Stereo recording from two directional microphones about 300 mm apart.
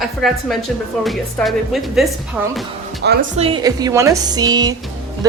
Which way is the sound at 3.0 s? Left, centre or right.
Right.